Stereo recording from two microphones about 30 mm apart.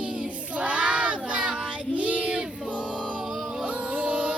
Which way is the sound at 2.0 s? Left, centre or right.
Right.